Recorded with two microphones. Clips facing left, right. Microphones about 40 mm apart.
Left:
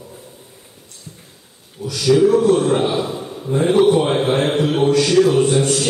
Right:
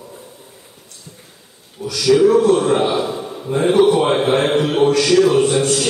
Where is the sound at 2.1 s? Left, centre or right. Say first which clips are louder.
Right 1 dB; centre.